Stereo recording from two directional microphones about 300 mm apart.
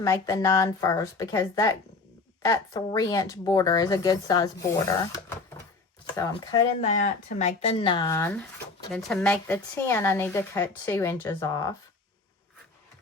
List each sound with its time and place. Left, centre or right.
0.0 s a woman's voice: centre